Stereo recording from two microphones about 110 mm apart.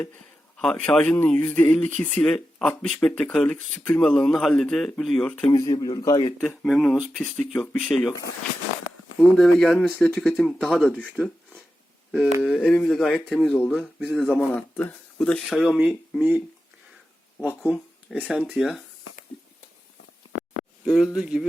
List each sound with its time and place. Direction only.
0.0 s speech: 10° left (ahead or behind)
5.5 s speech: 35° left (ahead or behind)
6.7 s speech: centre (ahead or behind)
7.2 s speech: 10° left (ahead or behind)
9.3 s speech: 5° left (ahead or behind)
12.1 s speech: 5° right (ahead or behind)
12.6 s speech: 10° left (ahead or behind)
13.6 s speech: 5° left (ahead or behind)
14.5 s speech: 15° left (ahead or behind)
15.2 s speech: 5° left (ahead or behind)
16.1 s speech: 10° right (ahead or behind)
17.4 s speech: 15° right (ahead or behind)
20.8 s speech: 5° right (ahead or behind)